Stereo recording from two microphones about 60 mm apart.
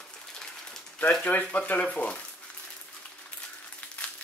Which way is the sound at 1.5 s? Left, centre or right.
Left.